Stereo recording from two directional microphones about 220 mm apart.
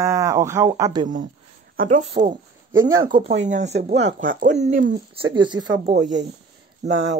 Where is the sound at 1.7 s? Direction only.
35° right (ahead or behind).